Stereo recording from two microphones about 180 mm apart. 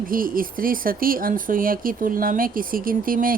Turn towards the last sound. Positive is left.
turn(degrees=-50)  # may be behind; listen again after turning